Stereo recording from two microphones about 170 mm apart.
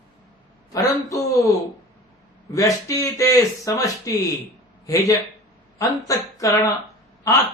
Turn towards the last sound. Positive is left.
turn(degrees=20)  # may be behind; listen again after turning